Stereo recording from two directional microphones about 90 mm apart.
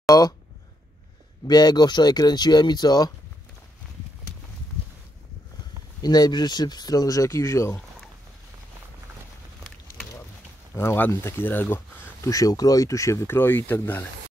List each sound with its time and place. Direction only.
0.0 s speech: 45° left (ahead or behind)
1.5 s speech: 50° left (ahead or behind)
6.0 s speech: 50° left (ahead or behind); by 7.8 s 35° left (ahead or behind)
10.7 s speech: 25° left (ahead or behind)
12.3 s speech: 40° left (ahead or behind); by 14.0 s 25° left (ahead or behind)